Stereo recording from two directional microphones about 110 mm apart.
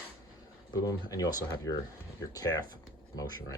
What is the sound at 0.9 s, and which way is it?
Speech, 35° left (ahead or behind).